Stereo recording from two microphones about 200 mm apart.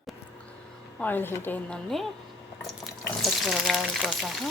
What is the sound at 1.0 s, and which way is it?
A woman's voice, 10° left (ahead or behind).